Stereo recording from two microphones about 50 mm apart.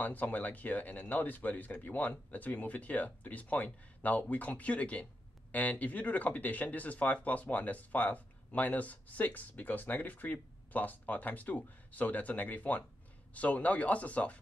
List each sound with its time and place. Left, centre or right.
0.0 s speech: left